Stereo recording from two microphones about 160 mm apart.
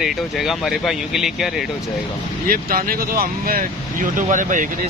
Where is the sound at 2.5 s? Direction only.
65° right (ahead or behind).